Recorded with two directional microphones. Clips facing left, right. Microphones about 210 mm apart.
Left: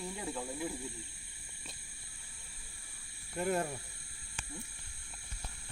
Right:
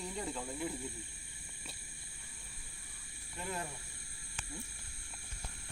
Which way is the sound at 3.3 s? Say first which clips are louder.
Left 9 dB; 45° left (ahead or behind).